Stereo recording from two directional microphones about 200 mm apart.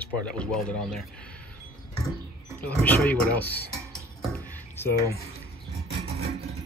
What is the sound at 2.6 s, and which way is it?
Speech, 5° left (ahead or behind).